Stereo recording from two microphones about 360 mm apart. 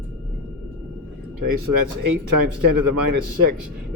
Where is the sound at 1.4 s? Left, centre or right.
Right.